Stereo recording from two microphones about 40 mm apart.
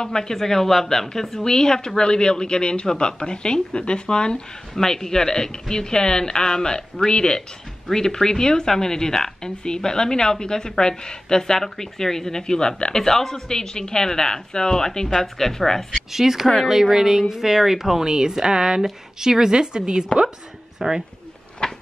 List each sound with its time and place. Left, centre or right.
0.0 s a woman's voice: centre
12.9 s a woman's voice: centre
16.1 s a woman's voice: centre
21.6 s a sound: centre